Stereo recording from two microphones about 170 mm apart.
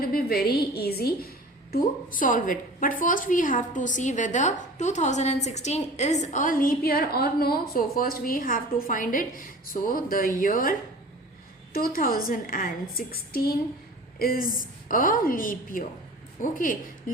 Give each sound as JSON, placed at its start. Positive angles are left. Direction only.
{"t": 0.0, "sound": "a woman's voice", "side_deg": 60}
{"t": 1.7, "sound": "a woman's voice", "side_deg": 55}